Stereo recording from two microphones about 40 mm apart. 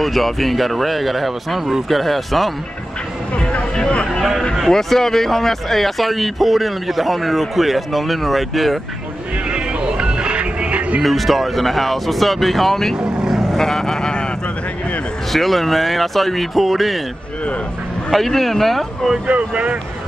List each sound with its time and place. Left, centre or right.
0.0 s speech: centre
3.7 s a sound: left
4.6 s speech: centre
9.5 s music: right
11.0 s speech: centre
12.9 s vehicle: centre
13.6 s speech: centre
15.3 s speech: centre
18.1 s speech: centre
19.2 s speech: right